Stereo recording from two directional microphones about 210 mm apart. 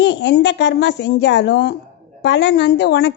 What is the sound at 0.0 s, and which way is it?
A woman's voice, 55° left (ahead or behind).